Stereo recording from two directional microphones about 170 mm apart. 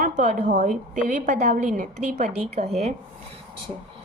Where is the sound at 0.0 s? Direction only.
50° right (ahead or behind).